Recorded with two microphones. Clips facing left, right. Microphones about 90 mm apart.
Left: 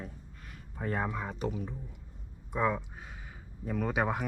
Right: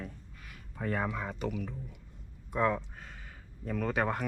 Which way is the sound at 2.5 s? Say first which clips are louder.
Right 1 dB; 10° left (ahead or behind).